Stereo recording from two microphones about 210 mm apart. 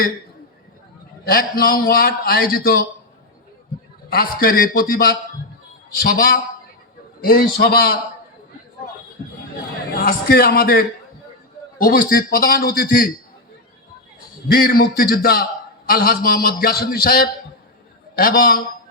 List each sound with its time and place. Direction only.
1.2 s a man's voice: 45° left (ahead or behind)
4.1 s a man's voice: 45° left (ahead or behind)
9.9 s a man's voice: 45° left (ahead or behind)
14.4 s a man's voice: 45° left (ahead or behind)